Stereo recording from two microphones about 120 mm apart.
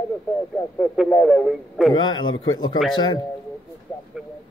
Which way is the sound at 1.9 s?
35° left (ahead or behind).